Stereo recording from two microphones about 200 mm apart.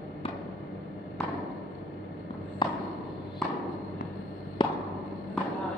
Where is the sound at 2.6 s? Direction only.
25° left (ahead or behind).